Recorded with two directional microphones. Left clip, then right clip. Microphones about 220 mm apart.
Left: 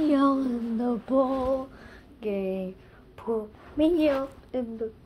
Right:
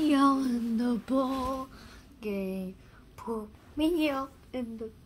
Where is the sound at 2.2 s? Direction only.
25° right (ahead or behind).